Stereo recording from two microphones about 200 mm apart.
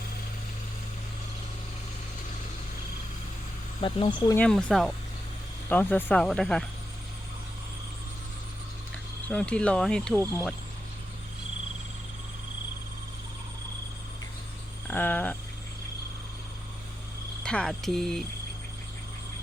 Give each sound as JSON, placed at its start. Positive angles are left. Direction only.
{"t": 3.8, "sound": "speech", "side_deg": 25}
{"t": 4.3, "sound": "speech", "side_deg": 5}
{"t": 9.3, "sound": "speech", "side_deg": 5}
{"t": 14.8, "sound": "a sound", "side_deg": 10}
{"t": 17.4, "sound": "speech", "side_deg": 5}